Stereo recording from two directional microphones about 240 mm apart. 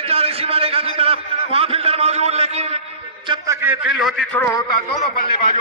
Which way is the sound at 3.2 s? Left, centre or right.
Centre.